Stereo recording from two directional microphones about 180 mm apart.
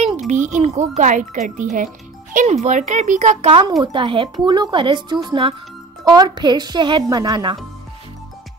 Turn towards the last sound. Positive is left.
turn(degrees=-25)  # may be behind; listen again after turning